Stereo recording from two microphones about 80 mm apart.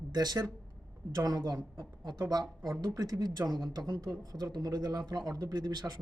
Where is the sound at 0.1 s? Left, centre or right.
Right.